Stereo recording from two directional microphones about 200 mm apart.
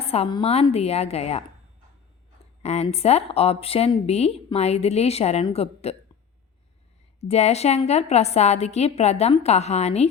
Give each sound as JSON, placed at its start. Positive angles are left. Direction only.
{"t": 0.0, "sound": "speech", "side_deg": 30}
{"t": 2.6, "sound": "speech", "side_deg": 30}
{"t": 7.2, "sound": "speech", "side_deg": 30}